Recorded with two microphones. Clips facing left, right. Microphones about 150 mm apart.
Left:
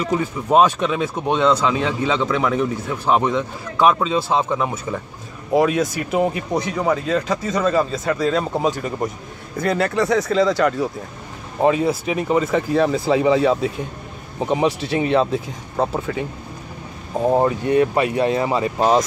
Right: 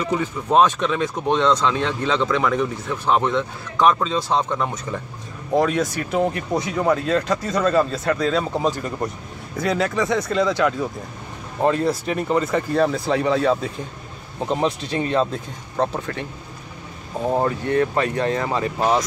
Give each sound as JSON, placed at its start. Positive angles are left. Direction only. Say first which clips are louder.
{"t": 0.1, "sound": "speech", "louder": "left 2 dB", "side_deg": 10}
{"t": 17.3, "sound": "speech", "louder": "left 3 dB", "side_deg": 15}
{"t": 18.8, "sound": "speech", "louder": "left 3 dB", "side_deg": 25}